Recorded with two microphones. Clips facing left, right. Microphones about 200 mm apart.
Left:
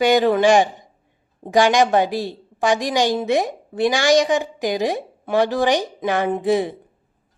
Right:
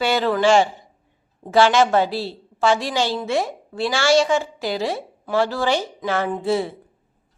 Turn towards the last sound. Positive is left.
turn(degrees=15)  # may be behind; listen again after turning